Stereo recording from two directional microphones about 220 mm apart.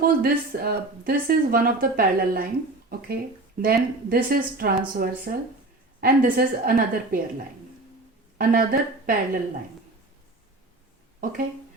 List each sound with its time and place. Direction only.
0.0 s speech: 45° right (ahead or behind)
3.6 s a woman's voice: 40° right (ahead or behind)
8.4 s a woman's voice: 40° right (ahead or behind)
11.2 s speech: 40° right (ahead or behind)